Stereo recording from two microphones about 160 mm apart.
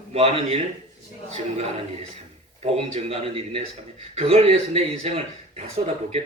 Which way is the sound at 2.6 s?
40° right (ahead or behind).